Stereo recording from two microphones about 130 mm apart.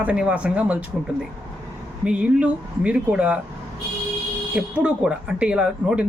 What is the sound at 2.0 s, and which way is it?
Speech, 10° right (ahead or behind).